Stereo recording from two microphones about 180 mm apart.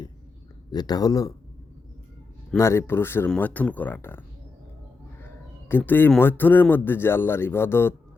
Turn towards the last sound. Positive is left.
turn(degrees=10)  # may be behind; listen again after turning